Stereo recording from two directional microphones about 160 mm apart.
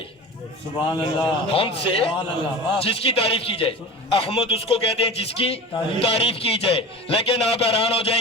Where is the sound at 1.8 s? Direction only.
35° left (ahead or behind).